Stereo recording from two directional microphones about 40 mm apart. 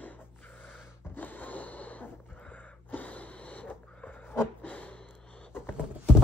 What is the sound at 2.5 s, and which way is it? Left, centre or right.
Wheeze, left.